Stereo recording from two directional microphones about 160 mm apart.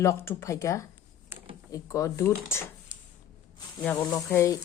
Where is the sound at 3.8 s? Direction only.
10° left (ahead or behind).